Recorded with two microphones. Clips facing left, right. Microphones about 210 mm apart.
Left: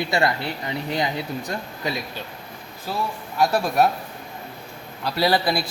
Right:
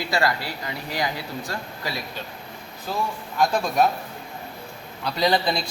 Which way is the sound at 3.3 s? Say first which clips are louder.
Left 1 dB; 5° left (ahead or behind).